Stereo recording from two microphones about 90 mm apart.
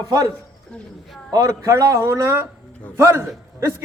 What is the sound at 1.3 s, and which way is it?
A man's voice, 40° right (ahead or behind).